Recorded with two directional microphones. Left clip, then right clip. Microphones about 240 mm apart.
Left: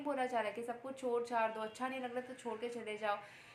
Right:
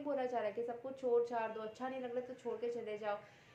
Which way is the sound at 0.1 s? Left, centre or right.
Left.